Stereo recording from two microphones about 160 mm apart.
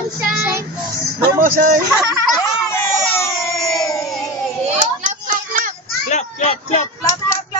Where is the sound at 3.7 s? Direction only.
20° left (ahead or behind).